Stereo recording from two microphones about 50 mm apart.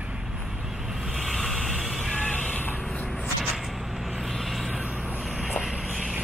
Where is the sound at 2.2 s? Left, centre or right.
Left.